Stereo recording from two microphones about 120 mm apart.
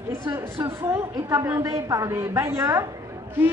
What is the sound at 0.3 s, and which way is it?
Speech, 20° right (ahead or behind).